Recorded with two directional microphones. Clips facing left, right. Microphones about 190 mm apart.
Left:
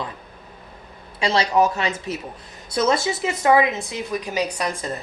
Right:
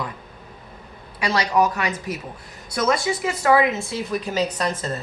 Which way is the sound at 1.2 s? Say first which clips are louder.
Left 1 dB; 25° left (ahead or behind).